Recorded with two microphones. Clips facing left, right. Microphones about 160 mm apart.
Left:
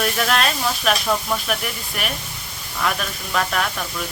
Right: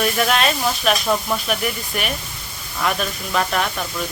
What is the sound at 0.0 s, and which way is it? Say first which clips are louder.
Speech: right 2 dB; 5° right (ahead or behind).